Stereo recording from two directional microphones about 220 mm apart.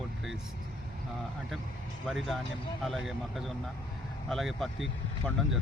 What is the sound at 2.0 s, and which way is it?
Speech, centre (ahead or behind).